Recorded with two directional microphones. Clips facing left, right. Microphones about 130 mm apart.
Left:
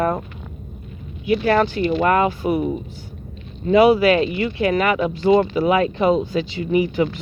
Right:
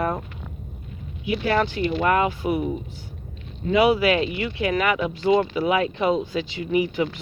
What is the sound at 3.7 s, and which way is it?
Speech, 40° left (ahead or behind).